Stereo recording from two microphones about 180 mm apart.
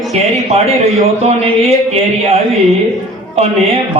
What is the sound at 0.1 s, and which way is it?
A man's voice, 35° right (ahead or behind).